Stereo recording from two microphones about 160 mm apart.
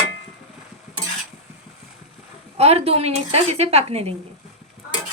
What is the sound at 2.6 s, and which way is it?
A woman's voice, 40° right (ahead or behind).